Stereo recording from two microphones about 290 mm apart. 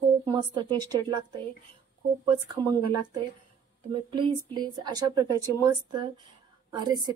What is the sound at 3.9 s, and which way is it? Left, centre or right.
A woman's voice, centre.